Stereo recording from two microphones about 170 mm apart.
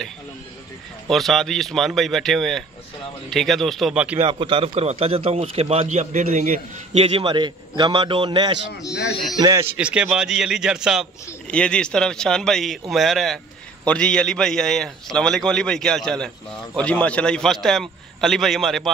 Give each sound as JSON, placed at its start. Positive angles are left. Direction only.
{"t": 1.0, "sound": "a man's voice", "side_deg": 0}
{"t": 4.2, "sound": "a man's voice", "side_deg": -30}
{"t": 7.0, "sound": "a man's voice", "side_deg": -30}
{"t": 9.4, "sound": "a man's voice", "side_deg": -15}